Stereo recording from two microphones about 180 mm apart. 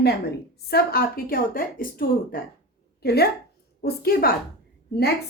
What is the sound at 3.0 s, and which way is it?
A woman's voice, 60° left (ahead or behind).